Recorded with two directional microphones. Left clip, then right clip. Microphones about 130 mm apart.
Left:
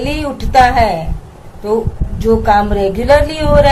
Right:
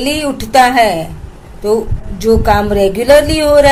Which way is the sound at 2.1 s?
40° right (ahead or behind).